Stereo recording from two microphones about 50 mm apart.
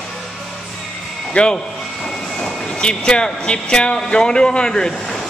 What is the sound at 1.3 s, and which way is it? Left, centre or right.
Speech, centre.